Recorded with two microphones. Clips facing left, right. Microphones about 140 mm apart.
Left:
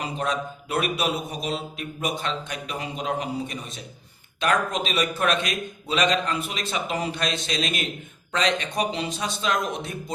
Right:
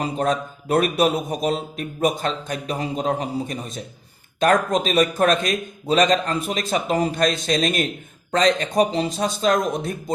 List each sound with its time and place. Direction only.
0.0 s a man's voice: 40° right (ahead or behind)